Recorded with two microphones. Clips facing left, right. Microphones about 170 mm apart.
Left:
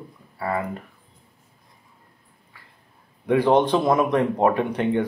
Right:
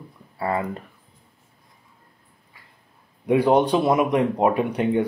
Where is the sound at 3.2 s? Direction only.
15° right (ahead or behind).